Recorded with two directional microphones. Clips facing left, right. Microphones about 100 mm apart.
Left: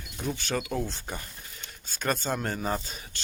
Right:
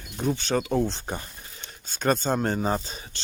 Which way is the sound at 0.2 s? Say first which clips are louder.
Right 6 dB; 30° right (ahead or behind).